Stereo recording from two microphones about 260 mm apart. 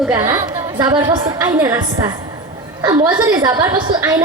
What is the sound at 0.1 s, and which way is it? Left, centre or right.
A woman's voice, centre.